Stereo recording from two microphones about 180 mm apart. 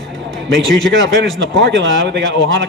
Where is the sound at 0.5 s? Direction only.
90° right.